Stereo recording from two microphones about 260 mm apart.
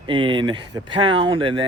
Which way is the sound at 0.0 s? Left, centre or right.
Centre.